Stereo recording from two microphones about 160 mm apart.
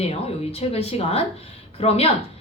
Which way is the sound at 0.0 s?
40° left (ahead or behind).